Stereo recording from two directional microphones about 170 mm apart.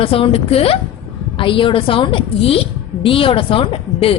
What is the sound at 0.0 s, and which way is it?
A woman's voice, 30° left (ahead or behind).